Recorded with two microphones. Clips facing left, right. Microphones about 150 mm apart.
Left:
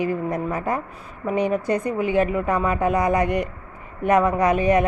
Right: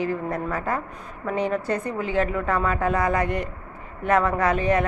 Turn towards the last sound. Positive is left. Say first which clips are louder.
# left 3 dB
turn(degrees=15)  # may be behind; listen again after turning